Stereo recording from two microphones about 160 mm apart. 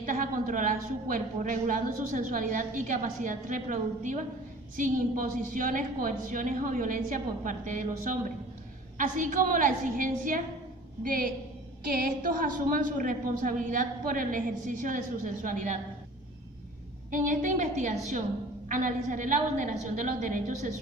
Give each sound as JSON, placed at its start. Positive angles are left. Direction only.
{"t": 0.0, "sound": "a woman's voice", "side_deg": -55}
{"t": 17.1, "sound": "a woman's voice", "side_deg": -55}